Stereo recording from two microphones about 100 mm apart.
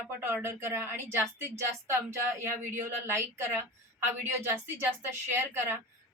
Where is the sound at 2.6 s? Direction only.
20° right (ahead or behind).